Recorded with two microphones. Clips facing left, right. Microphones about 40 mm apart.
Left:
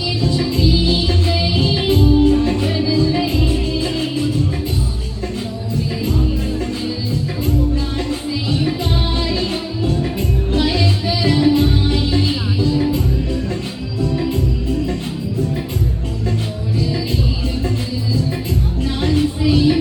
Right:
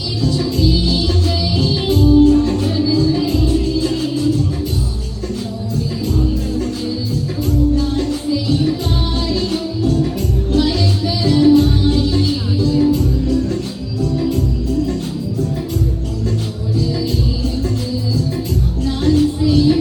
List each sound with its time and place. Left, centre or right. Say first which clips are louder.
0.2 s music: right 2 dB; left
5.7 s music: even; left
18.8 s music: right 4 dB; left